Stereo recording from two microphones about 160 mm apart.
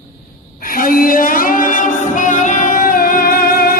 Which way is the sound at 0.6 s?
60° left (ahead or behind).